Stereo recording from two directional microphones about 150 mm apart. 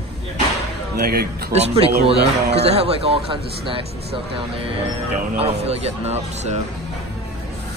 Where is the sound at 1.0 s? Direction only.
90° right.